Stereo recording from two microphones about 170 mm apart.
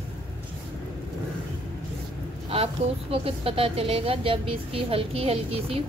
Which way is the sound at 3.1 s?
35° right (ahead or behind).